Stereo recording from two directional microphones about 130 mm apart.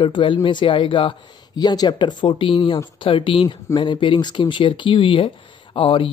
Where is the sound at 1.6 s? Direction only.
30° left (ahead or behind).